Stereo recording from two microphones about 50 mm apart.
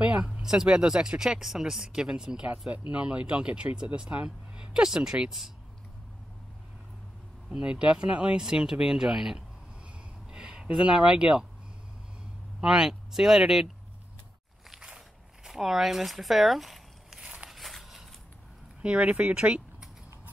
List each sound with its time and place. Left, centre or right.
0.0 s a sound: right
0.3 s speech: centre
2.7 s speech: right
7.5 s speech: centre
12.5 s speech: centre
15.4 s speech: centre
17.5 s a sound: centre
18.8 s speech: right